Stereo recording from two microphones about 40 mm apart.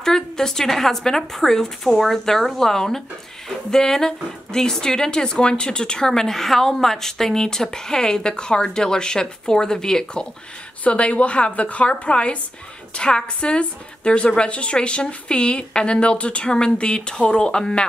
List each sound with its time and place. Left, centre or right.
0.0 s a woman's voice: centre
10.8 s a woman's voice: left